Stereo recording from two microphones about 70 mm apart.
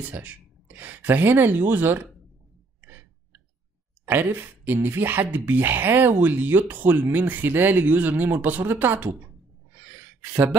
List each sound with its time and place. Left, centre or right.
0.1 s speech: right
4.0 s speech: right
9.7 s gasp: right